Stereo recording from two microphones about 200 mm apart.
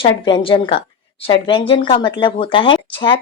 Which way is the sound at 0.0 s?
25° left (ahead or behind).